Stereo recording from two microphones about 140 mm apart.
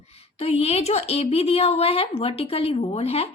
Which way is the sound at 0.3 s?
45° left (ahead or behind).